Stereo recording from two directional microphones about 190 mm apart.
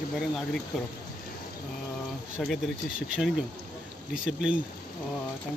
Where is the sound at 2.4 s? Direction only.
Centre (ahead or behind).